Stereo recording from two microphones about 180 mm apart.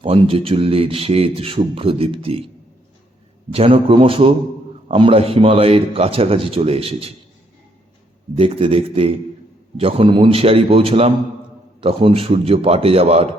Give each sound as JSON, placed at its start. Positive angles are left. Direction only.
{"t": 0.0, "sound": "speech", "side_deg": -30}
{"t": 3.5, "sound": "a man's voice", "side_deg": -30}
{"t": 8.4, "sound": "speech", "side_deg": -30}